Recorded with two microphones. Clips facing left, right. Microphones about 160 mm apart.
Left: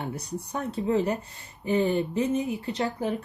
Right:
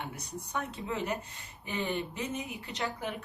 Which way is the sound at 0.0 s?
35° left (ahead or behind).